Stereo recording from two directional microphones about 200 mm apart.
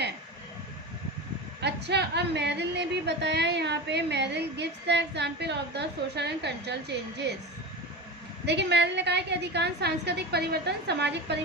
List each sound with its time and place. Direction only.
1.6 s a woman's voice: 55° right (ahead or behind)
8.4 s a woman's voice: 60° right (ahead or behind)